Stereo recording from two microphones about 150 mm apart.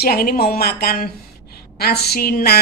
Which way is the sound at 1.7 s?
90° left.